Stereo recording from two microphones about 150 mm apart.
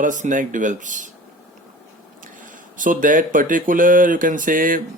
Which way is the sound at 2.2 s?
60° right (ahead or behind).